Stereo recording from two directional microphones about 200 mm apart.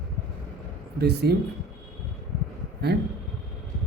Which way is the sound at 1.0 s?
55° right (ahead or behind).